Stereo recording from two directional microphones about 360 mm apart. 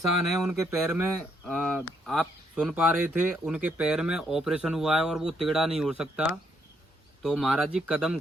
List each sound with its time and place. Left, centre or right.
0.4 s speech: centre